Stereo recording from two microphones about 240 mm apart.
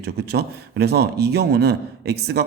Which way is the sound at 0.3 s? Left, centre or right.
Right.